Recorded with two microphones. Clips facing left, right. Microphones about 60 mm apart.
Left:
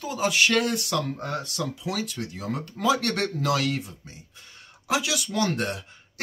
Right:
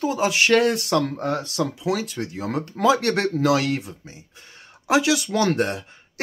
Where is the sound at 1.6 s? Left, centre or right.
Right.